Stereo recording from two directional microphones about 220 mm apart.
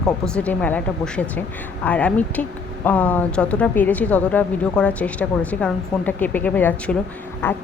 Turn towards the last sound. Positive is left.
turn(degrees=10)  # may be behind; listen again after turning